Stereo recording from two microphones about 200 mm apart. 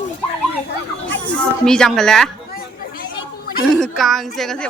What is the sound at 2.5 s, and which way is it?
Chatter, 45° left (ahead or behind).